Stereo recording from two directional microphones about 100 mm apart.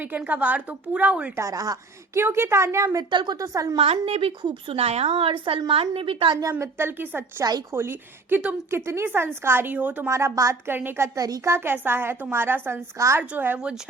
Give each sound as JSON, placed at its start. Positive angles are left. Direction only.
{"t": 0.2, "sound": "a woman's voice", "side_deg": -15}
{"t": 1.4, "sound": "speech", "side_deg": -35}
{"t": 2.2, "sound": "a woman's voice", "side_deg": -25}
{"t": 3.1, "sound": "speech", "side_deg": -50}
{"t": 3.3, "sound": "speech", "side_deg": -35}
{"t": 3.9, "sound": "a woman's voice", "side_deg": -70}
{"t": 4.7, "sound": "a woman's voice", "side_deg": -90}
{"t": 6.5, "sound": "a woman's voice", "side_deg": -25}
{"t": 10.1, "sound": "a woman's voice", "side_deg": -30}